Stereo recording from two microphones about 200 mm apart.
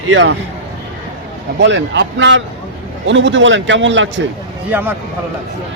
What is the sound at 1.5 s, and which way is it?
Speech, 65° right (ahead or behind).